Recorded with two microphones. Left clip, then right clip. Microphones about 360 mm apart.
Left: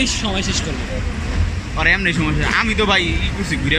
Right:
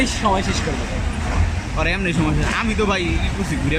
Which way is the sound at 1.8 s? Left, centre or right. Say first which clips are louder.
Left 5 dB; centre.